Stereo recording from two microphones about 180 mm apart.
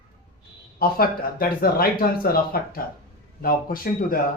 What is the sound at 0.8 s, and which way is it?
Speech, 55° left (ahead or behind).